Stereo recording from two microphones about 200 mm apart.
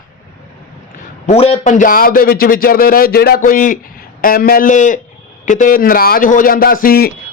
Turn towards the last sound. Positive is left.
turn(degrees=45)  # may be behind; listen again after turning